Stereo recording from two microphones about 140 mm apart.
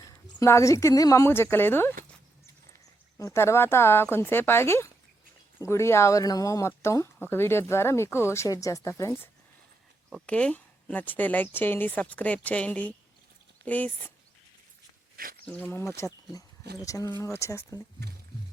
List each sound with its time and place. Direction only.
0.0 s speech: 20° left (ahead or behind)
3.2 s speech: 20° left (ahead or behind)
10.2 s speech: 10° left (ahead or behind)
15.1 s a sound: 90° right
15.4 s speech: 10° left (ahead or behind)